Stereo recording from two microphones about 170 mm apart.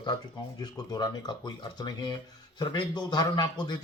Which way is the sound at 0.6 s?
25° left (ahead or behind).